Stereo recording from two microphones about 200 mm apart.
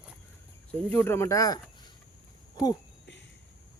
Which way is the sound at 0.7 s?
10° left (ahead or behind).